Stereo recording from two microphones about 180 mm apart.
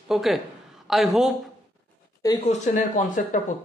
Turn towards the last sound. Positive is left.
turn(degrees=45)  # may be behind; listen again after turning